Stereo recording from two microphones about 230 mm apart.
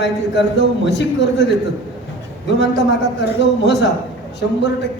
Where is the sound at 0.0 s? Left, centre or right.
Left.